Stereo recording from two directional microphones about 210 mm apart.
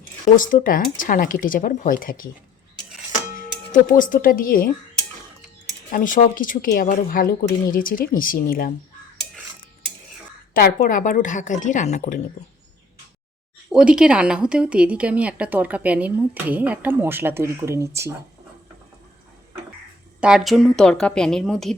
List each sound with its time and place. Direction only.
0.3 s speech: 40° left (ahead or behind)
3.3 s speech: 40° left (ahead or behind)
5.9 s speech: 40° left (ahead or behind)
10.5 s speech: 45° left (ahead or behind)
13.7 s speech: 5° right (ahead or behind)
20.2 s speech: centre (ahead or behind)